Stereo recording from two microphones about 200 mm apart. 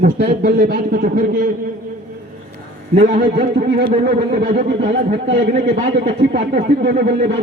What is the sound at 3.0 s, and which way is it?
Speech, 45° right (ahead or behind).